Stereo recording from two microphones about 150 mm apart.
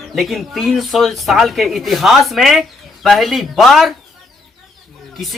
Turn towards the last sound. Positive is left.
turn(degrees=0)  # may be behind; listen again after turning